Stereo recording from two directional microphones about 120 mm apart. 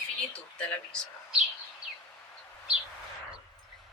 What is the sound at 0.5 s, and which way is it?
Speech, 10° left (ahead or behind).